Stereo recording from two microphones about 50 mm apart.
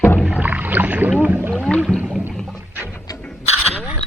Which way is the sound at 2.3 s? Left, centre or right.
Centre.